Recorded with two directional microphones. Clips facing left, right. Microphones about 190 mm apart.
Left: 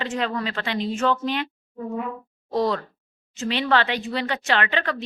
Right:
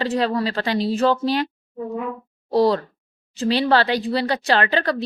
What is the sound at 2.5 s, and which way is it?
Speech, 35° right (ahead or behind).